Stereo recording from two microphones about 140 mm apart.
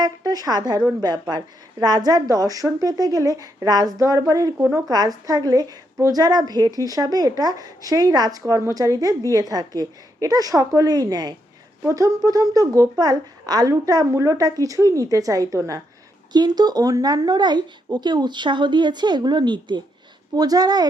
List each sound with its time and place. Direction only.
0.0 s a woman's voice: 30° right (ahead or behind)